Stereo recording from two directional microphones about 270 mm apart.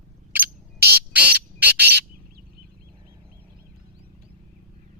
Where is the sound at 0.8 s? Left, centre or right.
Right.